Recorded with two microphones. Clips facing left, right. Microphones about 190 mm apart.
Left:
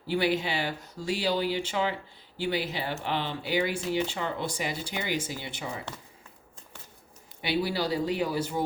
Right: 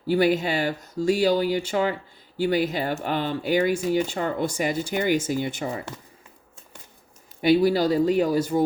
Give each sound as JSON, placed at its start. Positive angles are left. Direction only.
{"t": 0.1, "sound": "speech", "side_deg": -45}
{"t": 7.4, "sound": "speech", "side_deg": -45}